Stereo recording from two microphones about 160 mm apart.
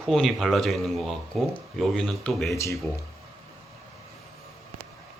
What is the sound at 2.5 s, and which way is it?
Speech, 20° left (ahead or behind).